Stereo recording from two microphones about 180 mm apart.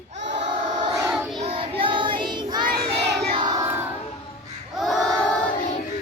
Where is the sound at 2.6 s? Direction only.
60° right (ahead or behind).